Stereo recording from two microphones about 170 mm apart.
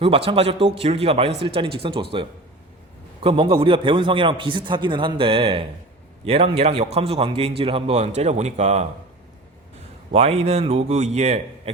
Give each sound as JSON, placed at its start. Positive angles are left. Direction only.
{"t": 0.0, "sound": "speech", "side_deg": -30}
{"t": 3.2, "sound": "a man's voice", "side_deg": -30}
{"t": 10.1, "sound": "speech", "side_deg": -35}